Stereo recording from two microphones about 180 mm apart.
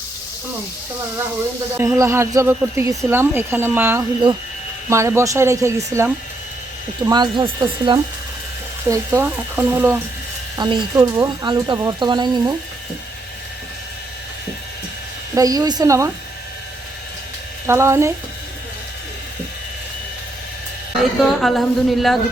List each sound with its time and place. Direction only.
1.7 s speech: 15° right (ahead or behind)
8.9 s speech: 10° right (ahead or behind)
10.6 s speech: 25° right (ahead or behind)
15.4 s speech: 20° right (ahead or behind)
17.7 s speech: 15° right (ahead or behind)
21.0 s a woman's voice: centre (ahead or behind)